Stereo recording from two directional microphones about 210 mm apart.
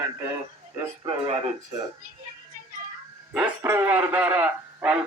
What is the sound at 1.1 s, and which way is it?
Speech, 25° right (ahead or behind).